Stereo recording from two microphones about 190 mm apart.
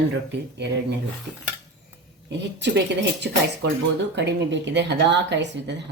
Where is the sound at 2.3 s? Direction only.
65° right (ahead or behind).